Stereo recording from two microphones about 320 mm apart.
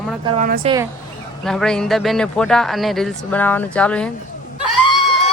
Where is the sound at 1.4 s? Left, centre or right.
Centre.